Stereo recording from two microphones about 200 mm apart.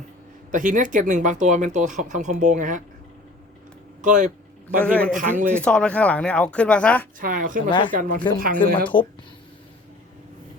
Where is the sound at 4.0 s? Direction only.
40° right (ahead or behind).